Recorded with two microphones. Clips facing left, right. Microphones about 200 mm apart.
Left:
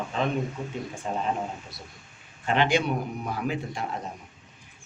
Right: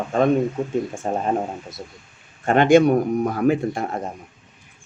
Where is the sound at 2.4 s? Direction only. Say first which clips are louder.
Right 10 dB; 50° right (ahead or behind).